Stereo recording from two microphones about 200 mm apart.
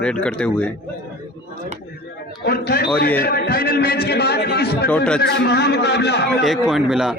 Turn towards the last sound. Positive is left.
turn(degrees=-5)  # may be behind; listen again after turning